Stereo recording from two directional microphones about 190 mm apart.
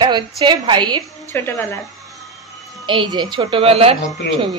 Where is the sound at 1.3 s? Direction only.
10° left (ahead or behind).